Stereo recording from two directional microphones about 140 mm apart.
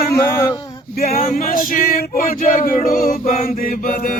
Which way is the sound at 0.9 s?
90° left.